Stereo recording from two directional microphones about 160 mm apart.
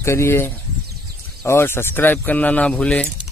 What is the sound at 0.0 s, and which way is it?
Speech, 15° left (ahead or behind).